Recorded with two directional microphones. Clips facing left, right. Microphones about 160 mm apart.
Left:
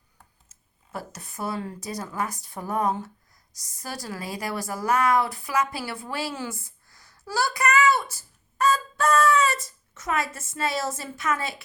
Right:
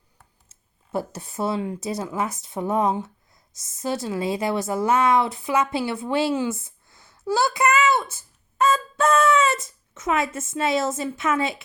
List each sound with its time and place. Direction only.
0.9 s a woman's voice: 25° right (ahead or behind)